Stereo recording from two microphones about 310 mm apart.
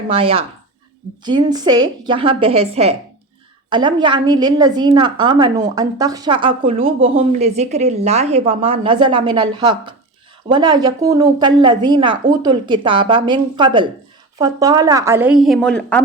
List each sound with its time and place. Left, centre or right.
0.1 s a woman's voice: centre